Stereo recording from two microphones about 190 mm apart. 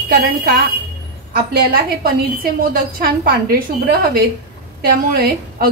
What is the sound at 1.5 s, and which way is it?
A woman's voice, 55° right (ahead or behind).